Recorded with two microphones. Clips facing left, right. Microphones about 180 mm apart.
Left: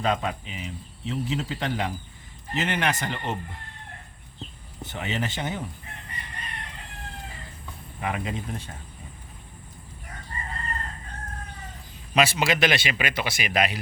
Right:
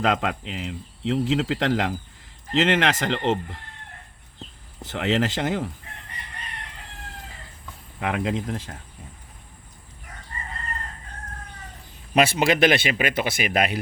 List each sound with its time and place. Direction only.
0.0 s speech: 90° right
4.8 s speech: 90° right
8.0 s speech: 90° right
12.1 s speech: 55° right (ahead or behind)